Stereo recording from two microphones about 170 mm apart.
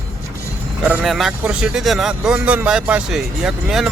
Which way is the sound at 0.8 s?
5° right (ahead or behind).